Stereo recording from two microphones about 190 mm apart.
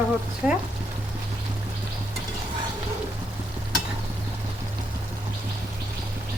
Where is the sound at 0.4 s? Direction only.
5° right (ahead or behind).